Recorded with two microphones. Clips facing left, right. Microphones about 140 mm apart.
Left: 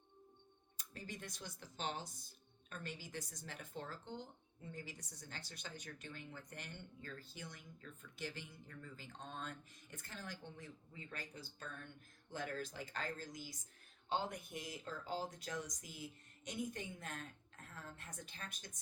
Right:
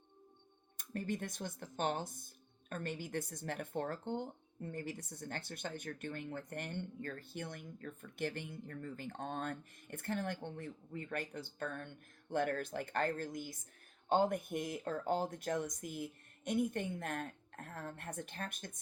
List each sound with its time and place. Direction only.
0.8 s speech: 55° right (ahead or behind)